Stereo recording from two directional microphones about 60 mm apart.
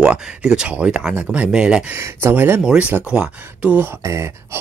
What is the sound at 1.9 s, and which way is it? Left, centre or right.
Speech, right.